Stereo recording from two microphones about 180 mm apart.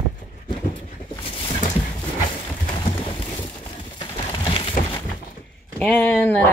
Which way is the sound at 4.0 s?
30° left (ahead or behind).